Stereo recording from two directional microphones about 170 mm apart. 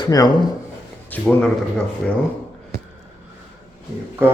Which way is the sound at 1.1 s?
5° left (ahead or behind).